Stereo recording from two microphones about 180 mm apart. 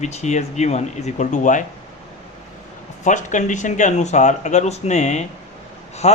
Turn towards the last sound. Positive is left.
turn(degrees=40)  # may be behind; listen again after turning